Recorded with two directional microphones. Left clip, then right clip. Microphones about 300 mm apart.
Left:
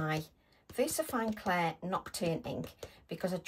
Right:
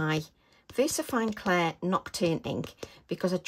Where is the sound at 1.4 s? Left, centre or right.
Right.